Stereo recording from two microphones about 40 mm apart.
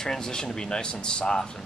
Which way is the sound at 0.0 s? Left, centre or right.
Centre.